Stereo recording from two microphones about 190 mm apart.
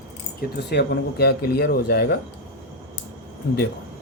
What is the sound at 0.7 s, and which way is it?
Speech, 60° left (ahead or behind).